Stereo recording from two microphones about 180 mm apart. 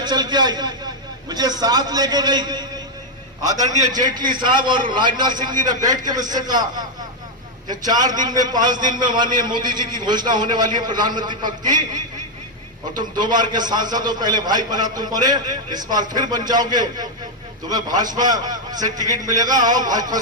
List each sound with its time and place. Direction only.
0.0 s a man's voice: 25° right (ahead or behind)
13.1 s a man's voice: 25° right (ahead or behind)